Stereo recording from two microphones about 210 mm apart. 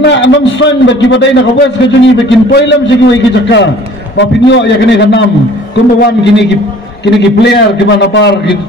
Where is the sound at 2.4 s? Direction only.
55° left (ahead or behind).